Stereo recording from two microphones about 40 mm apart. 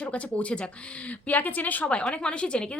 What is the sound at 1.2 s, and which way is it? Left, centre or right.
Speech, left.